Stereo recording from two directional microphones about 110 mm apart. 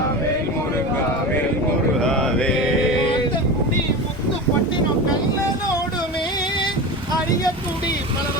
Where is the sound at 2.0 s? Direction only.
5° left (ahead or behind).